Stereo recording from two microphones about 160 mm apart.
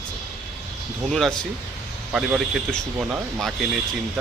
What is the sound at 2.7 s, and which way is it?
Speech, centre (ahead or behind).